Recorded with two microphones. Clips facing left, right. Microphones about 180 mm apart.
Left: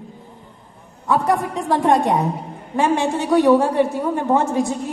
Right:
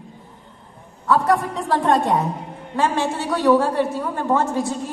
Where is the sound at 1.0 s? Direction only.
15° left (ahead or behind).